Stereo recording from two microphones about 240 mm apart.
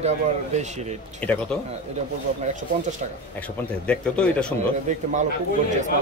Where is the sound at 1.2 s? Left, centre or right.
Centre.